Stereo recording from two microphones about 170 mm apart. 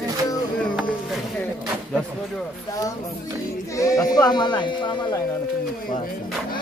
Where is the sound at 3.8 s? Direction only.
20° left (ahead or behind).